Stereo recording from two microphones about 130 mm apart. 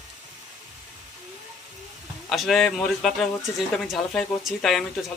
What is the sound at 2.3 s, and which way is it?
Speech, centre (ahead or behind).